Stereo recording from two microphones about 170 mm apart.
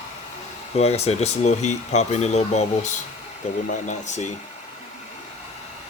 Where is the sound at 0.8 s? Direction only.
40° left (ahead or behind).